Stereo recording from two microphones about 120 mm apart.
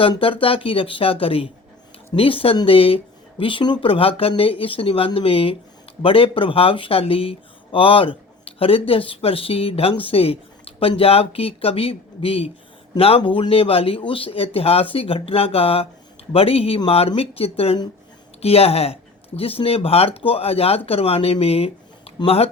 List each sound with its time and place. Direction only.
0.2 s speech: 50° left (ahead or behind)